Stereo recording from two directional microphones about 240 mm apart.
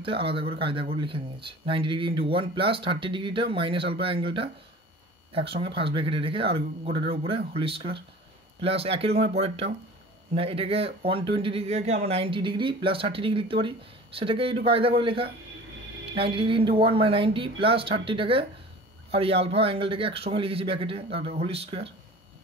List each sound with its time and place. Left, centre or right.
0.0 s speech: right